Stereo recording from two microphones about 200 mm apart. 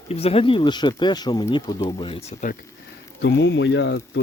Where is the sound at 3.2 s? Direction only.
65° left (ahead or behind).